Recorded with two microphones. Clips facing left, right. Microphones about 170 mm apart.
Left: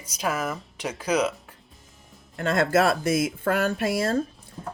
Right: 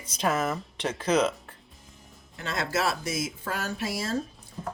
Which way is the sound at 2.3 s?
50° left (ahead or behind).